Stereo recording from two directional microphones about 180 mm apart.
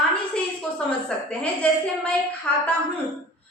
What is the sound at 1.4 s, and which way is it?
Child singing, 5° left (ahead or behind).